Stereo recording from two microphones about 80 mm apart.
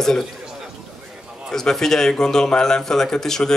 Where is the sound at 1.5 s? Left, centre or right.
Centre.